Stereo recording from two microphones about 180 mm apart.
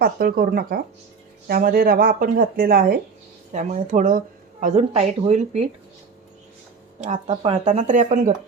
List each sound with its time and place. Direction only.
0.0 s speech: 55° right (ahead or behind)
3.5 s speech: 40° right (ahead or behind)
7.0 s speech: 35° right (ahead or behind)